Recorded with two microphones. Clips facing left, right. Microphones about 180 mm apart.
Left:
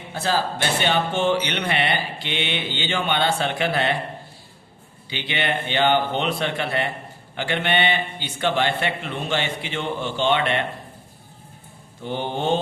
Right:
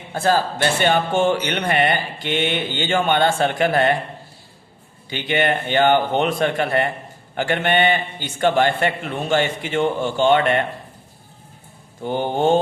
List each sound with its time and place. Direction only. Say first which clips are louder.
0.1 s speech: right 5 dB; 50° right (ahead or behind)
5.0 s speech: right 6 dB; 45° right (ahead or behind)
12.0 s speech: right 5 dB; 45° right (ahead or behind)